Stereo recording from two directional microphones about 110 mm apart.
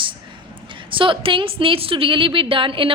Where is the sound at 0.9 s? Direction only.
50° right (ahead or behind).